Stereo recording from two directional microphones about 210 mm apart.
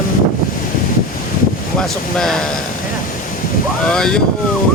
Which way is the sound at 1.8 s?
5° left (ahead or behind).